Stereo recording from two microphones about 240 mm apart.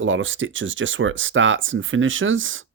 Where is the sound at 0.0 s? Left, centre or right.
Right.